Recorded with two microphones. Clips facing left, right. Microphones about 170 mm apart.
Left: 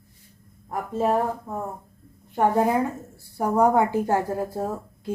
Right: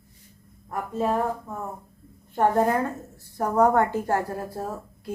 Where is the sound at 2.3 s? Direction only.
10° left (ahead or behind).